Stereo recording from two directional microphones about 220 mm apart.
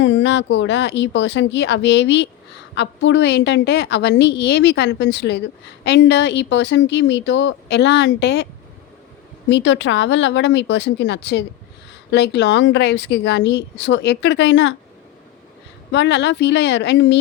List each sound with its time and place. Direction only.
0.0 s a woman's voice: 55° left (ahead or behind)
9.5 s a woman's voice: 55° left (ahead or behind)
15.9 s a woman's voice: 50° left (ahead or behind)